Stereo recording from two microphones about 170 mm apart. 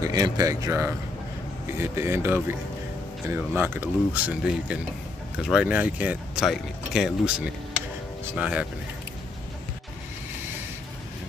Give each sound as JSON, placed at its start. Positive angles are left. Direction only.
{"t": 0.0, "sound": "speech", "side_deg": -20}